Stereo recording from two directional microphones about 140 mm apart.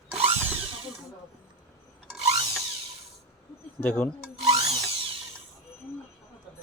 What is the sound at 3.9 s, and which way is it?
Speech, 5° left (ahead or behind).